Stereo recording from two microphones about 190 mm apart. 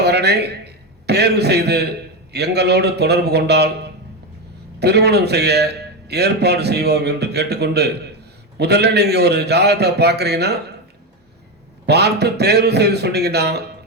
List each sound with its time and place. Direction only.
0.0 s a man's voice: 60° right (ahead or behind)
11.9 s a man's voice: 60° right (ahead or behind)